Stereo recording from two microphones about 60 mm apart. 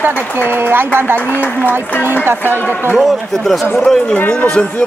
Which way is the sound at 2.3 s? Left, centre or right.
Right.